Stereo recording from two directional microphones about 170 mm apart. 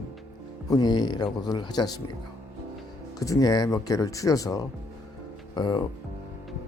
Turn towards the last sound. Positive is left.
turn(degrees=25)  # may be behind; listen again after turning